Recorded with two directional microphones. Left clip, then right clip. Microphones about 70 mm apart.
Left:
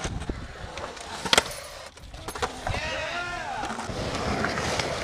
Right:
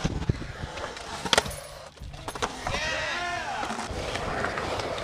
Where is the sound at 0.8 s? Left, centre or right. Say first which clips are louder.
Left 1 dB; centre.